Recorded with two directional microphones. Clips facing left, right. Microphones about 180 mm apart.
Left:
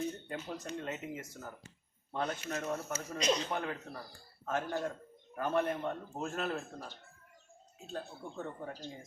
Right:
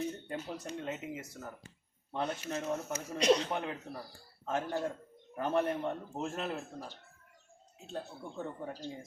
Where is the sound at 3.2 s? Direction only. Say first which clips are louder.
Right 5 dB; 70° right (ahead or behind).